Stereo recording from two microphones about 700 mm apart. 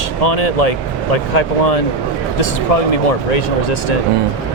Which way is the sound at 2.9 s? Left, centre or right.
Left.